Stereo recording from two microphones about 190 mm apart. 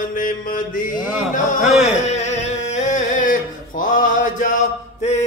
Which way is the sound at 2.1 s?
35° left (ahead or behind).